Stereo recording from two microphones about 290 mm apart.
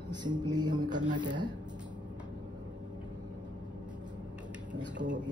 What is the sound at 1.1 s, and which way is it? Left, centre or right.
Speech, centre.